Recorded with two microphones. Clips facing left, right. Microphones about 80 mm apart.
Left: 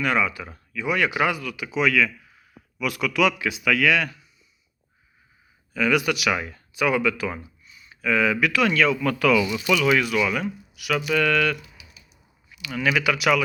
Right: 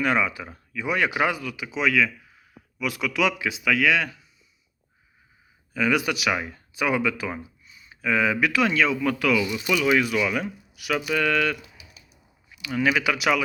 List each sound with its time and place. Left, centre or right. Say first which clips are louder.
0.0 s speech: even; right
5.7 s speech: left 1 dB; right
9.0 s speech: left 2 dB; centre
9.6 s speech: right 1 dB; centre